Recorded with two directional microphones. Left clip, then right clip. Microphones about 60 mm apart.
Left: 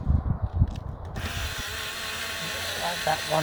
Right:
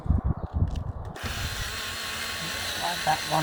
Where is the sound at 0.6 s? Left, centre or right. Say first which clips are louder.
Left 1 dB; left.